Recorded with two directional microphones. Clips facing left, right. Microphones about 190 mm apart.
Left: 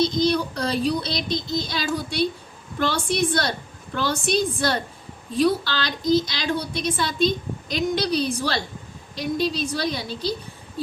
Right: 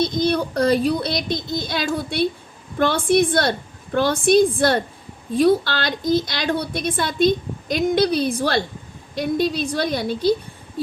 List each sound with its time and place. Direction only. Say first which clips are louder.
0.0 s a woman's voice: right 1 dB; 55° right (ahead or behind)